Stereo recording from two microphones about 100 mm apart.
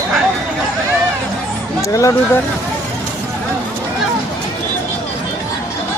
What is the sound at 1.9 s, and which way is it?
Speech, 30° left (ahead or behind).